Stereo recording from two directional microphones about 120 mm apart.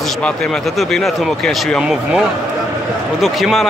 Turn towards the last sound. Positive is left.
turn(degrees=0)  # may be behind; listen again after turning